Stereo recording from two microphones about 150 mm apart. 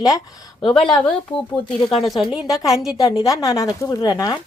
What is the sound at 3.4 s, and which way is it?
Speech, 25° left (ahead or behind).